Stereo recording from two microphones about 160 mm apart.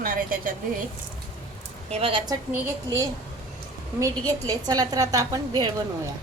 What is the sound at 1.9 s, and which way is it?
Speech, 35° right (ahead or behind).